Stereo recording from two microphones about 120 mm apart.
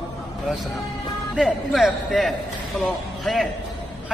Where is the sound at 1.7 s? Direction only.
Centre (ahead or behind).